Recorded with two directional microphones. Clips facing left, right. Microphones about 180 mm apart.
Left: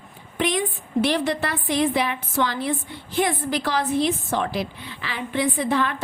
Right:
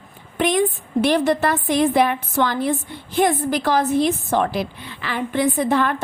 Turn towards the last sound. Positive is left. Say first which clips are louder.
# right 4 dB
turn(degrees=-50)  # may be behind; listen again after turning